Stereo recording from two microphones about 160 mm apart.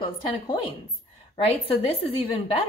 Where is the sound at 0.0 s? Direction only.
35° left (ahead or behind).